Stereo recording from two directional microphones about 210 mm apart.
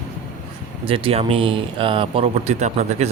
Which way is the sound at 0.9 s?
25° right (ahead or behind).